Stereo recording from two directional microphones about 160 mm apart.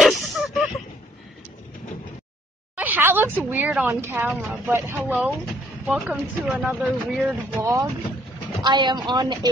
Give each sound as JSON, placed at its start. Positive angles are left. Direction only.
{"t": 0.0, "sound": "a sound", "side_deg": 0}
{"t": 2.7, "sound": "speech", "side_deg": -10}
{"t": 7.6, "sound": "speech", "side_deg": -20}